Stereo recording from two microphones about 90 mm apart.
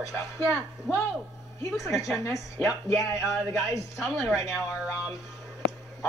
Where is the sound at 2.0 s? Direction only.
35° left (ahead or behind).